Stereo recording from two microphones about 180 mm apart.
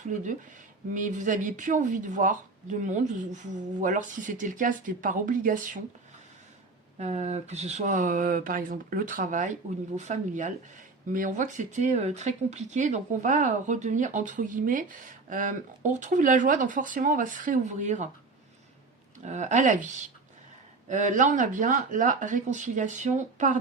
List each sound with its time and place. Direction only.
0.9 s speech: 45° right (ahead or behind)
7.0 s speech: 40° right (ahead or behind)
19.2 s speech: 40° right (ahead or behind)
20.9 s speech: 45° right (ahead or behind)